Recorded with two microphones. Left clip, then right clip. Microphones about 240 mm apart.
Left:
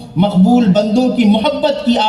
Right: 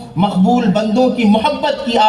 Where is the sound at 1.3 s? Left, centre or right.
Left.